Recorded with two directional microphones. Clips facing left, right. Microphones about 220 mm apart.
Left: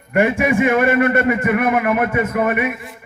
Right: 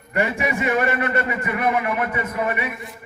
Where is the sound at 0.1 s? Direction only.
50° left (ahead or behind).